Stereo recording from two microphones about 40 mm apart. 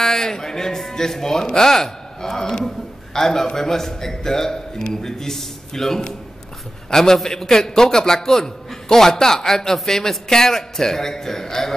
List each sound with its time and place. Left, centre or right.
0.0 s a man's voice: centre